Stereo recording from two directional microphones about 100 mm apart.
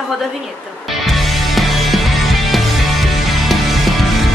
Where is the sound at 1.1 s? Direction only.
Centre (ahead or behind).